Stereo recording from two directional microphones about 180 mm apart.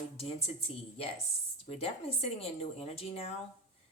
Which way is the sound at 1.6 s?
35° left (ahead or behind).